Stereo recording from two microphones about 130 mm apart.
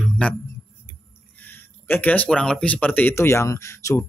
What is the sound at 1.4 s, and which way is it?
Speech, 15° left (ahead or behind).